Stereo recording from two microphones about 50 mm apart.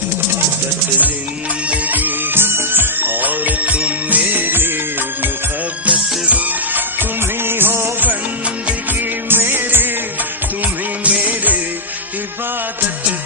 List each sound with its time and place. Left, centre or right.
1.7 s music: right
5.8 s music: right
7.0 s music of bollywood: right
8.9 s music: right
11.2 s music: right